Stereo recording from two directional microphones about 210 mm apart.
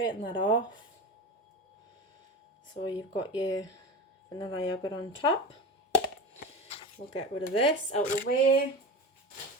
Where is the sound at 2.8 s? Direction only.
20° left (ahead or behind).